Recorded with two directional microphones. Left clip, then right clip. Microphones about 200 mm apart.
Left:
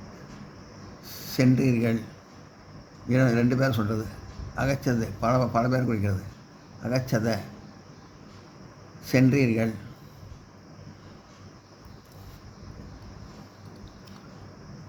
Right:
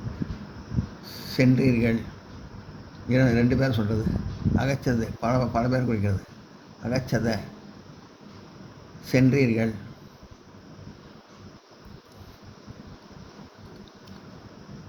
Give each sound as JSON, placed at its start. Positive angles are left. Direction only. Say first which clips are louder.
{"t": 1.0, "sound": "speech", "louder": "right 1 dB", "side_deg": 30}
{"t": 3.1, "sound": "speech", "louder": "right 1 dB", "side_deg": 30}
{"t": 9.0, "sound": "speech", "louder": "right 1 dB", "side_deg": 35}